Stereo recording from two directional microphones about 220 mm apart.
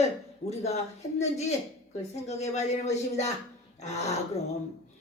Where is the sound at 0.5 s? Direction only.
30° left (ahead or behind).